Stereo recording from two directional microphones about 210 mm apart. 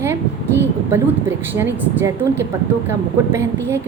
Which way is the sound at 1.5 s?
10° right (ahead or behind).